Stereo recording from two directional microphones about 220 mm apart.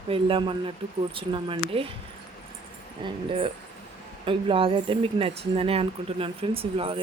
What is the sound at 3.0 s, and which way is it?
Speech, 25° right (ahead or behind).